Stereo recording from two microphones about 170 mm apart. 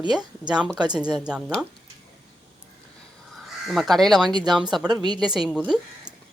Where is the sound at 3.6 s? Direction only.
Centre (ahead or behind).